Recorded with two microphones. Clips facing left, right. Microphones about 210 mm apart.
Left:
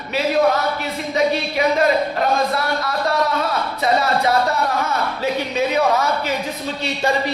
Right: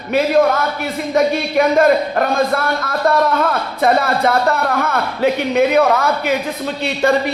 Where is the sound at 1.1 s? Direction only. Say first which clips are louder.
Right 4 dB; 50° right (ahead or behind).